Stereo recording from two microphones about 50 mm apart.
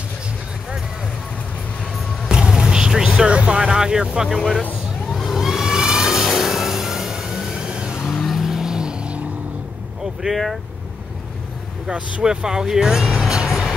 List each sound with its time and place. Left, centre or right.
2.2 s vehicle: centre
4.3 s speech: centre
5.1 s vehicle: centre
5.4 s vehicle: centre
8.1 s vehicle: centre; by 9.3 s right
10.3 s speech: centre
11.9 s speech: centre